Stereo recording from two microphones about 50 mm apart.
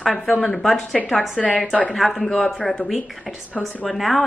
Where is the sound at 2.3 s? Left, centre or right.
Centre.